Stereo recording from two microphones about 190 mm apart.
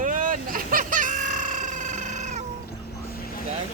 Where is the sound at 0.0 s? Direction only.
45° right (ahead or behind).